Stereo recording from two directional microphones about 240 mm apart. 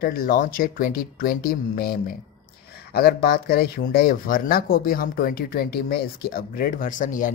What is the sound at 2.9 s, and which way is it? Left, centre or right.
Speech, left.